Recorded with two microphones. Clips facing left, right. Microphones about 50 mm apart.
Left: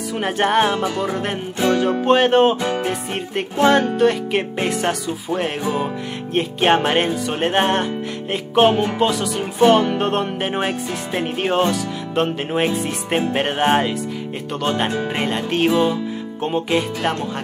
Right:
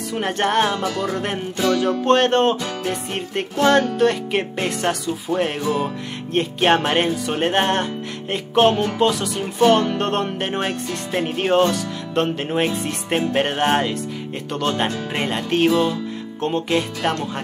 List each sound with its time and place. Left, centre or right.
0.2 s music: centre
1.6 s music: left
2.0 s music: centre
5.6 s music: centre
6.3 s music: centre
15.7 s music: centre
16.4 s music: centre